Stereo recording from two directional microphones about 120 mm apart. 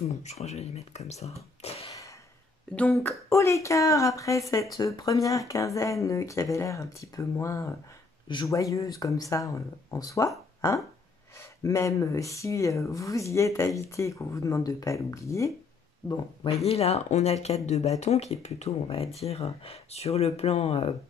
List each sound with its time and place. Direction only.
0.2 s speech: 70° left (ahead or behind)
1.9 s a sound: 30° left (ahead or behind)
2.7 s speech: 15° left (ahead or behind)
11.3 s speech: 25° left (ahead or behind)
16.6 s speech: 60° left (ahead or behind)